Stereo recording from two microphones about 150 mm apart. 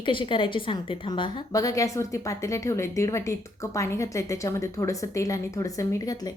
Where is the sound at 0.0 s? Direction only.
35° left (ahead or behind).